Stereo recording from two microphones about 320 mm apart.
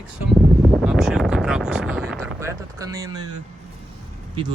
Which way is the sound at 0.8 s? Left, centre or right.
Centre.